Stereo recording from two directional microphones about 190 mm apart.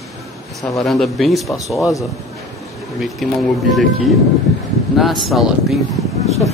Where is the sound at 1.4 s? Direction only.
15° left (ahead or behind).